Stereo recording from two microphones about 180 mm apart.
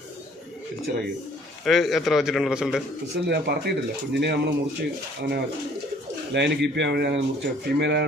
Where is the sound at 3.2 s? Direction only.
65° right (ahead or behind).